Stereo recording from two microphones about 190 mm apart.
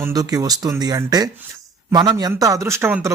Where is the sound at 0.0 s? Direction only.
20° right (ahead or behind).